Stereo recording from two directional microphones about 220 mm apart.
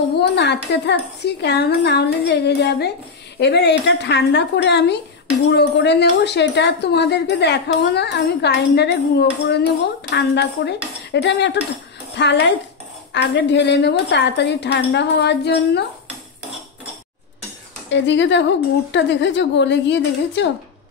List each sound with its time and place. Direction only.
0.2 s a woman's voice: 50° left (ahead or behind)
17.8 s a woman's voice: 55° left (ahead or behind)